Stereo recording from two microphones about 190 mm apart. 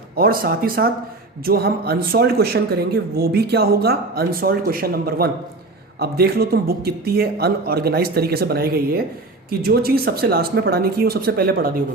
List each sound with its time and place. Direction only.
0.2 s speech: 50° right (ahead or behind)